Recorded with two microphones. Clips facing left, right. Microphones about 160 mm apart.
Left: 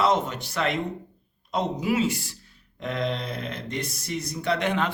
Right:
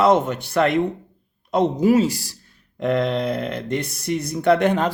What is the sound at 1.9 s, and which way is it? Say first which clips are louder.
Speech: right 8 dB; 40° right (ahead or behind).